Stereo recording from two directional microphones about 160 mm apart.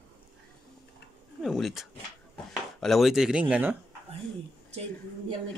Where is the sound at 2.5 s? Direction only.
Centre (ahead or behind).